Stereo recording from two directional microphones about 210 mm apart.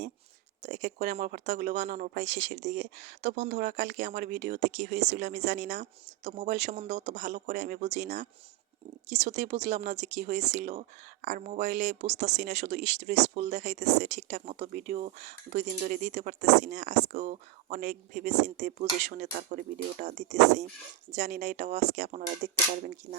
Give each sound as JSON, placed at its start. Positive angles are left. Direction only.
{"t": 0.6, "sound": "speech", "side_deg": -35}